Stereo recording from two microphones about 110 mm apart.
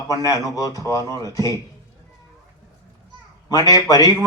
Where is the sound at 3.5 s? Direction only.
35° left (ahead or behind).